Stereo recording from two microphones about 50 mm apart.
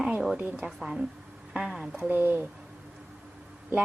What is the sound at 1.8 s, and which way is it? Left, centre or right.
Speech, right.